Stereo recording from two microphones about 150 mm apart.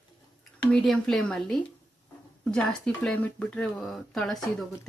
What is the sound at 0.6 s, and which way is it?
Speech, 5° left (ahead or behind).